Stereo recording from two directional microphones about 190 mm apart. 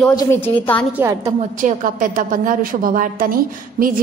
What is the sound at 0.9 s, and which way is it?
Speech, 15° right (ahead or behind).